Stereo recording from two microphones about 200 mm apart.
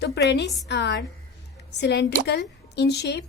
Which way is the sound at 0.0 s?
60° left (ahead or behind).